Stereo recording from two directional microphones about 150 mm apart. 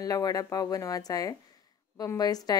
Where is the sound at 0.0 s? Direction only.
25° left (ahead or behind).